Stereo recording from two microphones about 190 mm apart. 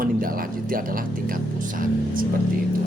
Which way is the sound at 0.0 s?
50° right (ahead or behind).